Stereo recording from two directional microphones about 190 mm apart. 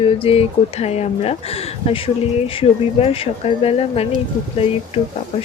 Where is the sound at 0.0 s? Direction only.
30° left (ahead or behind).